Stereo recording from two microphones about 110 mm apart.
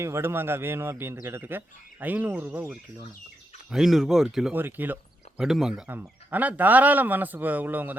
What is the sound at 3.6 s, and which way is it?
Speech, 5° right (ahead or behind).